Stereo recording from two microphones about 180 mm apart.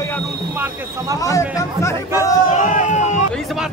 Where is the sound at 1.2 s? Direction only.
20° left (ahead or behind).